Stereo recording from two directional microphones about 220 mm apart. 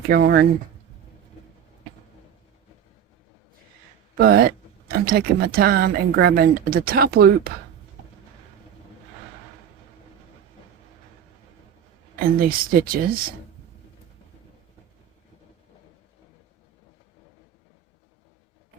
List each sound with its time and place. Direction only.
0.1 s speech: 45° right (ahead or behind)
4.2 s speech: 40° right (ahead or behind)
12.4 s speech: 40° right (ahead or behind)